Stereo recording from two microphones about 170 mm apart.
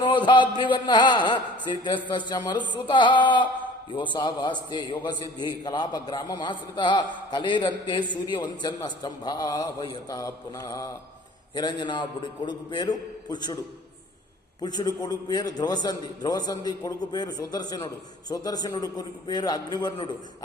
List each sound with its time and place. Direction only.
0.0 s a man's voice: 30° left (ahead or behind)
14.6 s a man's voice: 25° left (ahead or behind)